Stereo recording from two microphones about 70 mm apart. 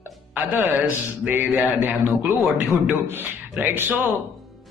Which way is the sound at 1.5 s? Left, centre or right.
Centre.